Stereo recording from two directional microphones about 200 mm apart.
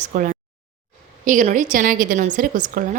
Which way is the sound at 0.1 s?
40° right (ahead or behind).